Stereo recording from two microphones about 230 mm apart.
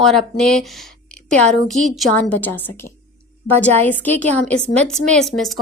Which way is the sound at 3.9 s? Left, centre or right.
Centre.